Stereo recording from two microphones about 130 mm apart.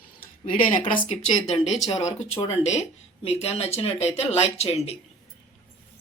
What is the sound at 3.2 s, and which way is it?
Speech, 55° left (ahead or behind).